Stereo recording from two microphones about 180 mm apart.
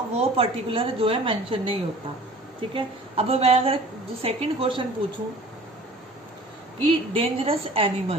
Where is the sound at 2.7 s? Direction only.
35° right (ahead or behind).